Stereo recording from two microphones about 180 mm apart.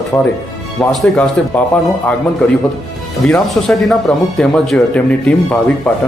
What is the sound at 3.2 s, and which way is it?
Speech, centre (ahead or behind).